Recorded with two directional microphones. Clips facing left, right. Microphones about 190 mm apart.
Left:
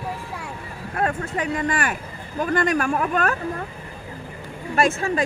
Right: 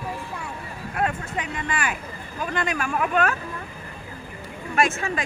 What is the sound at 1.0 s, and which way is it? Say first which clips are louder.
Speech: left 3 dB; 40° left (ahead or behind).